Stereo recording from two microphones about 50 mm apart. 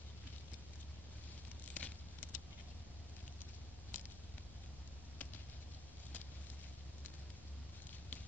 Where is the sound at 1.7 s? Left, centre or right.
Left.